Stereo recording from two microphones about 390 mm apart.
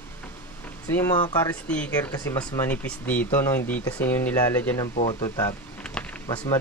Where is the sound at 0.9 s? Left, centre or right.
Centre.